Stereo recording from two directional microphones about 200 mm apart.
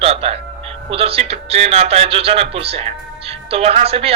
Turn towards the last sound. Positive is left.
turn(degrees=-30)  # may be behind; listen again after turning